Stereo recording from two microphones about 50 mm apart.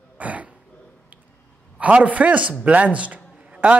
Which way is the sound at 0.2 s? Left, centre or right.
Right.